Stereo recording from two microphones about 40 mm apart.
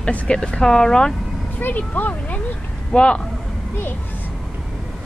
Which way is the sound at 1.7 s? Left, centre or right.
Left.